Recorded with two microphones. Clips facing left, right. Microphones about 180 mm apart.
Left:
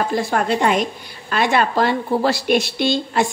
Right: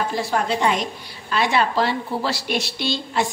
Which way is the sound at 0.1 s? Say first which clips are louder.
Left 3 dB; 50° left (ahead or behind).